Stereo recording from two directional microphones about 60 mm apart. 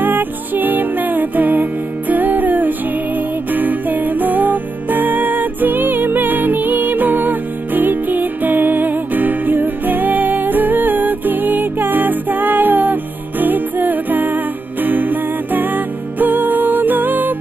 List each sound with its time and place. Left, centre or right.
0.0 s music: right